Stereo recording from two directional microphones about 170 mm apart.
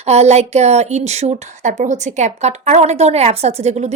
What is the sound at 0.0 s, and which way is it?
Speech, 40° right (ahead or behind).